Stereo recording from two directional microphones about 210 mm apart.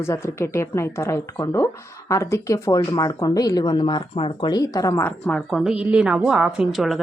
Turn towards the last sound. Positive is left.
turn(degrees=0)  # may be behind; listen again after turning